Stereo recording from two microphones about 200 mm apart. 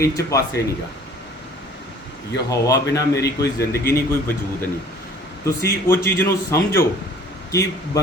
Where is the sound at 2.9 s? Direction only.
15° left (ahead or behind).